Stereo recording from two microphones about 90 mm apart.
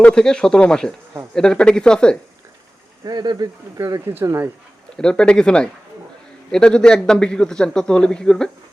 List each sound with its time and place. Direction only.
0.0 s a man's voice: 10° left (ahead or behind)
3.0 s speech: 50° right (ahead or behind)
4.1 s speech: 25° right (ahead or behind)
4.9 s a man's voice: 10° left (ahead or behind)